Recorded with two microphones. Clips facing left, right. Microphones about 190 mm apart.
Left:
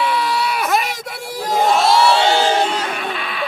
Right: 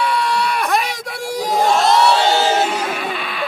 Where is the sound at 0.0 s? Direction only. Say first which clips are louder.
Even; centre (ahead or behind).